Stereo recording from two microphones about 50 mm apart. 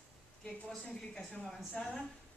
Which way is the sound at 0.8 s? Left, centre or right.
Centre.